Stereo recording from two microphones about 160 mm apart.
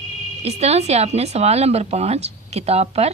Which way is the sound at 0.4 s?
40° right (ahead or behind).